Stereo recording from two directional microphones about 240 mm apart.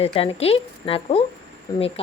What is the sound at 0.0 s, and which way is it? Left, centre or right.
Speech, left.